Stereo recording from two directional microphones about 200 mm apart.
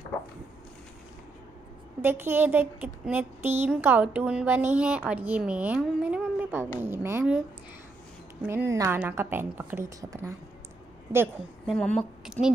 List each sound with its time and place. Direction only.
2.0 s a woman's voice: 10° right (ahead or behind)
11.6 s a woman's voice: 5° left (ahead or behind)